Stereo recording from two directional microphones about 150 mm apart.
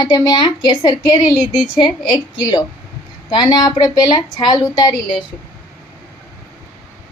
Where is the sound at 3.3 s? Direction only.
30° left (ahead or behind).